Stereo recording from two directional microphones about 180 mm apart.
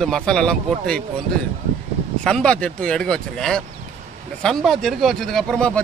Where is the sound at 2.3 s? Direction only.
5° left (ahead or behind).